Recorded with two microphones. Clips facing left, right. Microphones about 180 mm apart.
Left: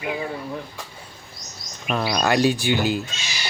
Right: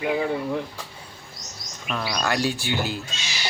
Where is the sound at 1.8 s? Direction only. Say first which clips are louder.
Left 5 dB; 25° left (ahead or behind).